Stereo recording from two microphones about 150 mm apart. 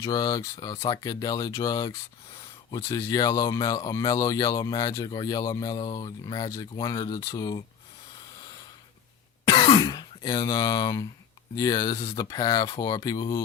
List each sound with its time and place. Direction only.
0.0 s speech: 25° left (ahead or behind)
9.5 s speech: 30° left (ahead or behind)